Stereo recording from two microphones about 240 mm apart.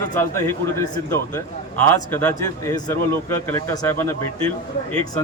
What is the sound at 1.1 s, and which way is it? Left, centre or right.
A man's voice, centre.